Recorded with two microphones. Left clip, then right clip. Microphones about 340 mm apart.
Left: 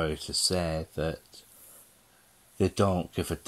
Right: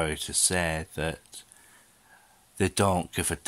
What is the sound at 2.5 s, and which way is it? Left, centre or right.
Speech, centre.